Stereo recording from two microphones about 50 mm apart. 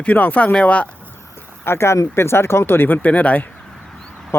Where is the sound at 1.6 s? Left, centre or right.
Left.